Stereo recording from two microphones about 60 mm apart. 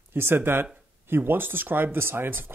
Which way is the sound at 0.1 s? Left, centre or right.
Right.